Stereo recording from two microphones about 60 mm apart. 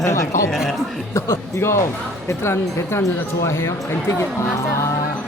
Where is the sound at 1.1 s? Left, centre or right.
Left.